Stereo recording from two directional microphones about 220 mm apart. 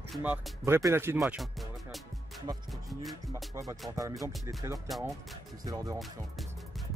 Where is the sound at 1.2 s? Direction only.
Centre (ahead or behind).